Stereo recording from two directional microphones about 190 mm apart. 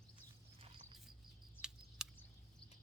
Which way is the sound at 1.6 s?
10° left (ahead or behind).